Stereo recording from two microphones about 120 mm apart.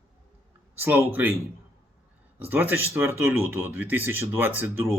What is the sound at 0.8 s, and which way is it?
Speech, 15° right (ahead or behind).